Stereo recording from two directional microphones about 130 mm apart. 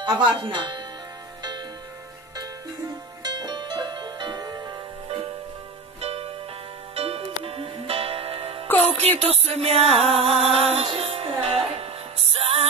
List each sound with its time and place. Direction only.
0.0 s speech: 35° right (ahead or behind)
3.3 s music: 35° right (ahead or behind); by 12.6 s 50° right (ahead or behind)